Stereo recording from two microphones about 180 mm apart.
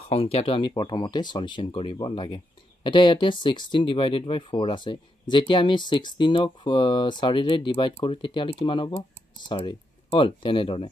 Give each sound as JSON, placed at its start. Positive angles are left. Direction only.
{"t": 0.1, "sound": "speech", "side_deg": 35}